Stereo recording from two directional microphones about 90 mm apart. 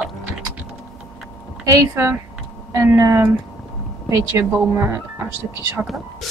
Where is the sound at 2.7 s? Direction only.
35° right (ahead or behind).